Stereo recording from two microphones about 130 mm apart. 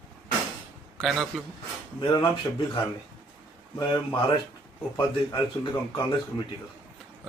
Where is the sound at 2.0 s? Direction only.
35° left (ahead or behind).